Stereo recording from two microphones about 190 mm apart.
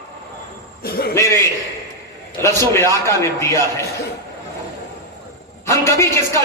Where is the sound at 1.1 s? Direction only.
15° left (ahead or behind).